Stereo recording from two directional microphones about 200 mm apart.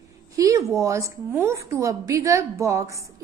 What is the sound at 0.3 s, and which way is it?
A woman's voice, 15° right (ahead or behind).